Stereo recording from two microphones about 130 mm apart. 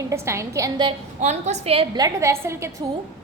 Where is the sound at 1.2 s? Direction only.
60° right (ahead or behind).